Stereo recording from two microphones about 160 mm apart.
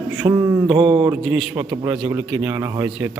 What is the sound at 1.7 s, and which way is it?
A man's voice, 15° right (ahead or behind).